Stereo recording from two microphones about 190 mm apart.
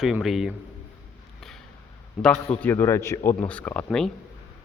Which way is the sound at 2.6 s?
10° left (ahead or behind).